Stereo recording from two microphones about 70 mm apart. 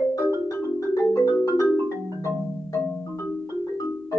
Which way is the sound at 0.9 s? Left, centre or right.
Left.